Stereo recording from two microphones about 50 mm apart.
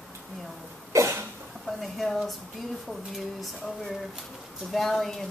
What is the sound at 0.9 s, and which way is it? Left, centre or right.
Cough, right.